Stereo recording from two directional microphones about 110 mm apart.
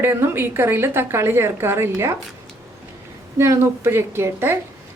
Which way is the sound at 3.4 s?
20° right (ahead or behind).